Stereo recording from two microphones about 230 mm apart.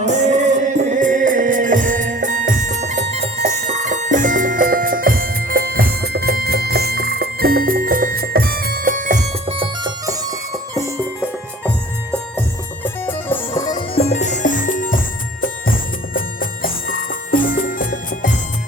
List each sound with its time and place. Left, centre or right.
0.0 s music: right
12.8 s music: centre; by 18.3 s left